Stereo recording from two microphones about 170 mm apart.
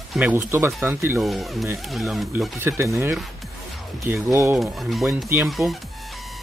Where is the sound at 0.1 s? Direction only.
10° right (ahead or behind).